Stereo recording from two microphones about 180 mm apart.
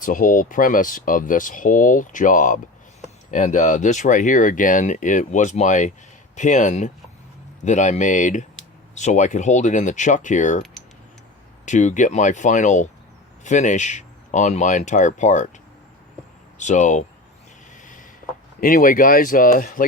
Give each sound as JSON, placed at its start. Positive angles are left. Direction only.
{"t": 0.0, "sound": "speech", "side_deg": 50}
{"t": 11.6, "sound": "speech", "side_deg": 40}
{"t": 16.6, "sound": "speech", "side_deg": 40}
{"t": 18.6, "sound": "speech", "side_deg": 50}